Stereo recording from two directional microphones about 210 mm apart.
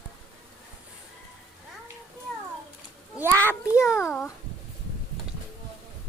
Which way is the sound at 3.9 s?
5° left (ahead or behind).